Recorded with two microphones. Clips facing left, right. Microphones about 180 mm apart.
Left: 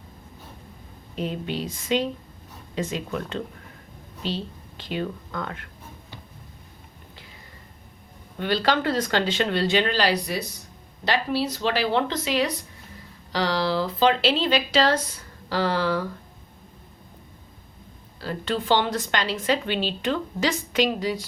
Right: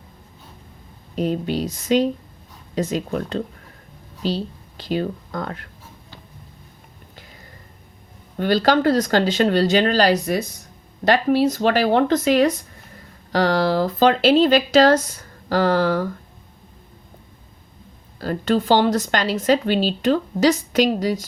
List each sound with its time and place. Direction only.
1.1 s a woman's voice: 40° right (ahead or behind)
8.4 s a woman's voice: 40° right (ahead or behind)
18.2 s a woman's voice: 45° right (ahead or behind)